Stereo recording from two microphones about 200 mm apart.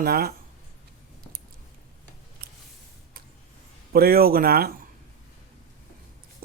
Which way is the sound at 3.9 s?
50° right (ahead or behind).